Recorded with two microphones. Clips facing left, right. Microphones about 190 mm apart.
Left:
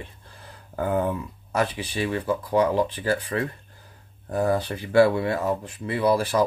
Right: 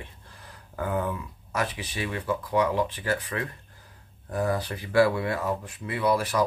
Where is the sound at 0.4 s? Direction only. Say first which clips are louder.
Left 4 dB; 30° left (ahead or behind).